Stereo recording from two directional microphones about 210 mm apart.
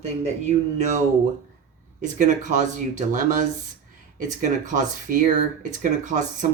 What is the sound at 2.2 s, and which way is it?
Speech, 35° right (ahead or behind).